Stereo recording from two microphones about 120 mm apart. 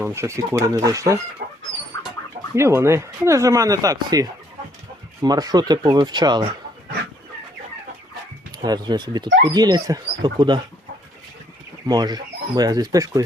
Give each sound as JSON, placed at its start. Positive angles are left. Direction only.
{"t": 0.0, "sound": "speech", "side_deg": -25}
{"t": 2.6, "sound": "speech", "side_deg": -25}
{"t": 8.5, "sound": "speech", "side_deg": -35}
{"t": 11.9, "sound": "speech", "side_deg": -35}